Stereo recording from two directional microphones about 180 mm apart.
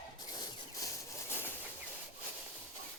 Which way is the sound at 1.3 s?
10° left (ahead or behind).